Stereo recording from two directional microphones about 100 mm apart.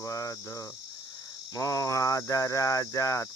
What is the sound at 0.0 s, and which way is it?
Cricket, 35° left (ahead or behind).